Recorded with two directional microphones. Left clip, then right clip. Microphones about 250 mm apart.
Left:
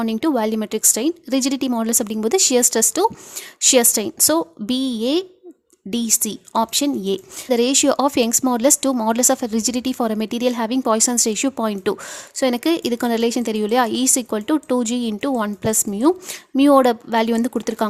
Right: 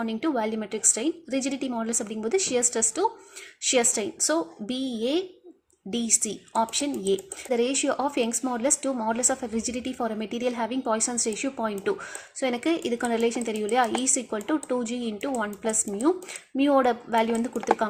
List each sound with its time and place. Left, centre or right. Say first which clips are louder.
0.0 s a woman's voice: left 7 dB; left